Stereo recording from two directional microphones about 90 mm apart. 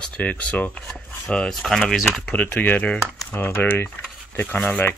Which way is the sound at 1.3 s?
5° left (ahead or behind).